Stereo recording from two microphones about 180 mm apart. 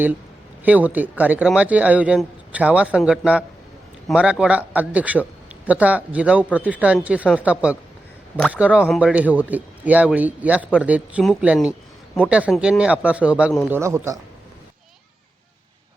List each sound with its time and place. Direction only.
0.6 s speech: 10° right (ahead or behind)